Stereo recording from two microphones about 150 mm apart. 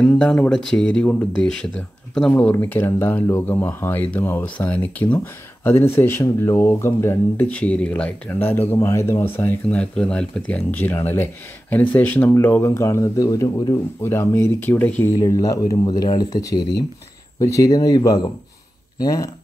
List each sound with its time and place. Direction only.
0.0 s speech: 5° left (ahead or behind); by 19.2 s 25° left (ahead or behind)